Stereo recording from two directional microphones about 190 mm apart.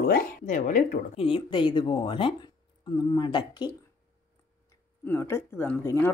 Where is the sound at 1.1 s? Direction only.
30° left (ahead or behind).